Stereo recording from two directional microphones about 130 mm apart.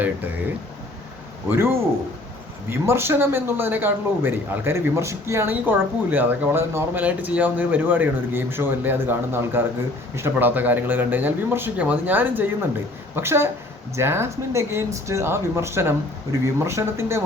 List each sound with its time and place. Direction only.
1.5 s a man's voice: 20° right (ahead or behind)